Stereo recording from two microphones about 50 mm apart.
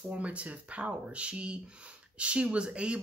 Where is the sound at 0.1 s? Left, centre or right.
Right.